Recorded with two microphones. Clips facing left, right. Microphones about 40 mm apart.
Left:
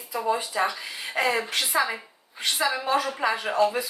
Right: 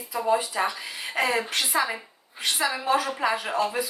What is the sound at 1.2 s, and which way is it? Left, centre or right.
Speech, centre.